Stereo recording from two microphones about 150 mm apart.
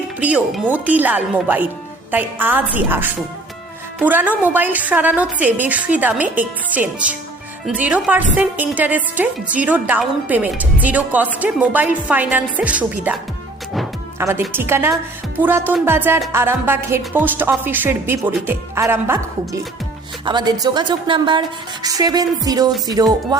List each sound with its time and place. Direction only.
0.2 s a woman's voice: 10° right (ahead or behind)
14.2 s a woman's voice: 15° right (ahead or behind)
20.2 s a woman's voice: 30° right (ahead or behind)